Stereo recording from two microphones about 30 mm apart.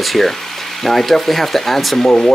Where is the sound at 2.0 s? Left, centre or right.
Left.